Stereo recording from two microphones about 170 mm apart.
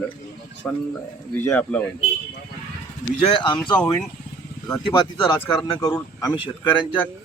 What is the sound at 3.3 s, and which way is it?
Speech, 30° left (ahead or behind).